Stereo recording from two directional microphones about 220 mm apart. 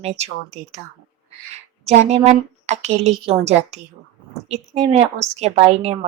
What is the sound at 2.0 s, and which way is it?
A woman's voice, 30° right (ahead or behind).